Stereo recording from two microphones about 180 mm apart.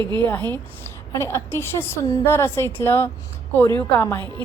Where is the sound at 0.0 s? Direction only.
25° right (ahead or behind).